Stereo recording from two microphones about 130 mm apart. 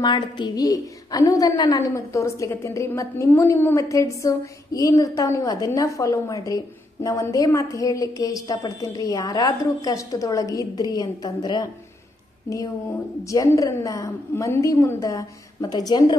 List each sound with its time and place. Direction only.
0.0 s a woman's voice: 35° left (ahead or behind)
13.2 s a woman's voice: 25° left (ahead or behind)